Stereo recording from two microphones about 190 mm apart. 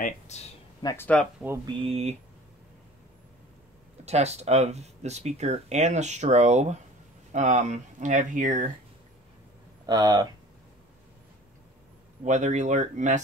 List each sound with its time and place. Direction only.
0.3 s speech: 35° left (ahead or behind)
0.8 s speech: 10° left (ahead or behind)
1.4 s speech: 10° right (ahead or behind)
1.9 s speech: 35° right (ahead or behind)
4.0 s speech: 35° right (ahead or behind)
9.8 s speech: 20° right (ahead or behind)
12.3 s speech: 40° right (ahead or behind)